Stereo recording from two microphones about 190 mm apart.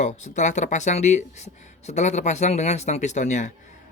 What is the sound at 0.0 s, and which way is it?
Speech, 40° left (ahead or behind).